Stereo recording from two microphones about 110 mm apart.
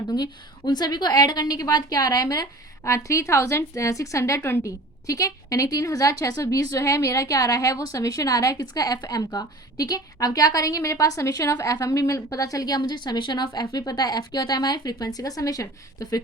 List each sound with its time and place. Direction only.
0.1 s a woman's voice: 40° left (ahead or behind)